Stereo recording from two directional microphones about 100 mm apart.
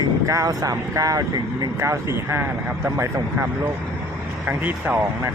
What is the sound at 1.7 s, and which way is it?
Speech, 30° right (ahead or behind).